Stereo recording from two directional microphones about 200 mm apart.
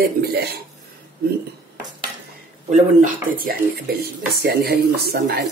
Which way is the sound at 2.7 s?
40° right (ahead or behind).